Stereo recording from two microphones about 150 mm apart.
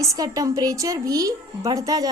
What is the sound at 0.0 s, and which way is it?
Speech, 25° right (ahead or behind).